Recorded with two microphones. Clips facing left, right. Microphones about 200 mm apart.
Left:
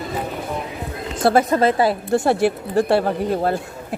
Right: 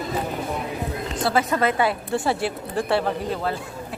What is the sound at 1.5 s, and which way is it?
A woman's voice, 35° left (ahead or behind).